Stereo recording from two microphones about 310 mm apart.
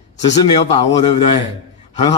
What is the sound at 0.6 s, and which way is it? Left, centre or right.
Speech, centre.